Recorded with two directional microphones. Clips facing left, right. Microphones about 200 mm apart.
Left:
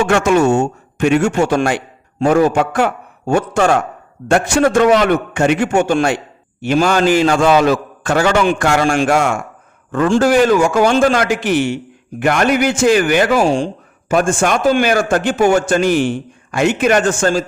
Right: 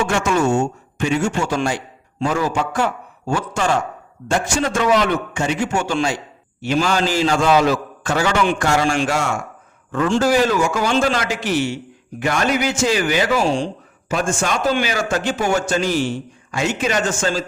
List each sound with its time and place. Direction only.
0.0 s a man's voice: 65° left (ahead or behind); by 17.4 s 50° left (ahead or behind)